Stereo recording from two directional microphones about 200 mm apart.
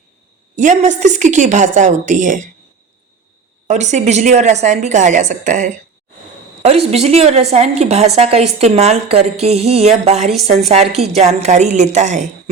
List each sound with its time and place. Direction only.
0.5 s a woman's voice: 35° right (ahead or behind)
3.7 s a woman's voice: 35° right (ahead or behind)